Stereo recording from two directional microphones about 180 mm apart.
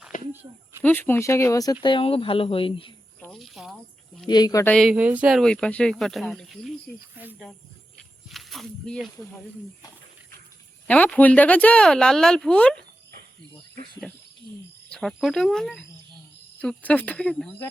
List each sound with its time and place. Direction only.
0.1 s a sound: 45° left (ahead or behind)
0.8 s speech: 10° left (ahead or behind); by 2.9 s 30° left (ahead or behind)
3.2 s cricket: centre (ahead or behind)
4.3 s speech: 25° left (ahead or behind)
4.6 s speech: 5° left (ahead or behind)
7.2 s speech: 10° right (ahead or behind)
8.3 s speech: centre (ahead or behind)
10.8 s speech: 5° left (ahead or behind)
14.8 s speech: 5° left (ahead or behind)